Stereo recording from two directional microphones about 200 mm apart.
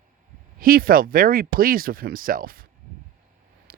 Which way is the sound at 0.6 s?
45° right (ahead or behind).